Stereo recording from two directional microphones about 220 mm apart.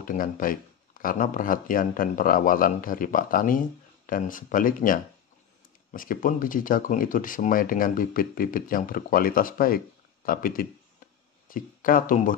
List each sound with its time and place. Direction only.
0.0 s speech: 40° left (ahead or behind)
5.9 s speech: 40° left (ahead or behind)